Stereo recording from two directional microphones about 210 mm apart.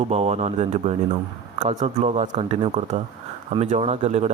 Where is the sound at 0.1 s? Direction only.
30° right (ahead or behind).